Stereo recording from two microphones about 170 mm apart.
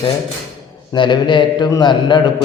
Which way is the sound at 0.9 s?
25° left (ahead or behind).